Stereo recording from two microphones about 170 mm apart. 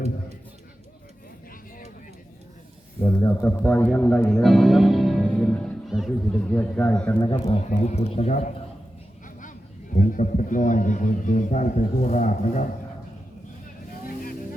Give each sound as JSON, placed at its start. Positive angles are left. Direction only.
{"t": 3.0, "sound": "speech", "side_deg": 20}
{"t": 7.2, "sound": "a man's voice", "side_deg": 20}
{"t": 7.7, "sound": "a man's voice", "side_deg": 40}